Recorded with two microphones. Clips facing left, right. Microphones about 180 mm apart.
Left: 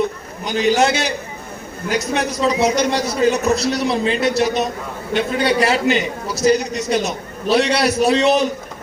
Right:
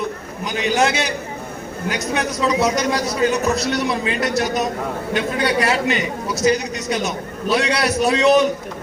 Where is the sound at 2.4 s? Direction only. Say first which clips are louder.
Left 2 dB; 30° left (ahead or behind).